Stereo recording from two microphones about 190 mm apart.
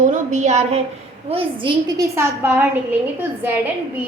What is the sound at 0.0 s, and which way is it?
A woman's voice, 40° right (ahead or behind).